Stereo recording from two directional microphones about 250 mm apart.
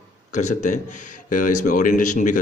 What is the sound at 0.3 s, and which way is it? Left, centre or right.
Speech, left.